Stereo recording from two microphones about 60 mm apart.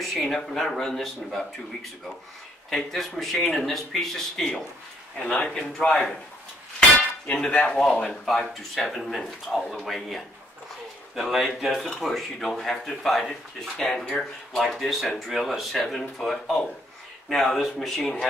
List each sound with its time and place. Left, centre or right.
0.1 s a man's voice: centre
7.2 s a man's voice: centre